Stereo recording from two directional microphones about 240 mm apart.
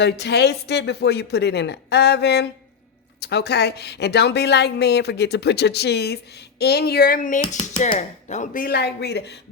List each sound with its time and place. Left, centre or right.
0.0 s speech: left